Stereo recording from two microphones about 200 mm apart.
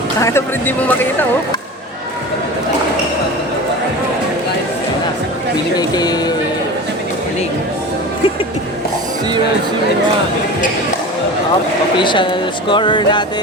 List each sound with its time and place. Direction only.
0.2 s speech: 15° left (ahead or behind)
5.7 s speech: 20° left (ahead or behind)
11.9 s speech: 25° left (ahead or behind)